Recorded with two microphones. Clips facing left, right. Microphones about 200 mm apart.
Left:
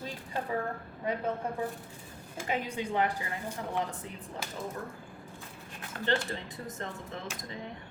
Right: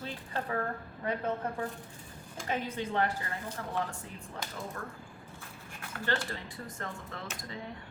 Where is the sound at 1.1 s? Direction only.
10° left (ahead or behind).